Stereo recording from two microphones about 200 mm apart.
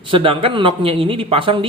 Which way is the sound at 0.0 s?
25° right (ahead or behind).